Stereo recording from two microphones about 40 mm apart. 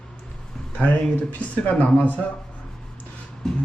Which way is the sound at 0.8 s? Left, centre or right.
Left.